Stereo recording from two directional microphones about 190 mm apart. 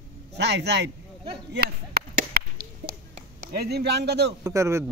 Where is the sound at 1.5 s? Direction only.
55° right (ahead or behind).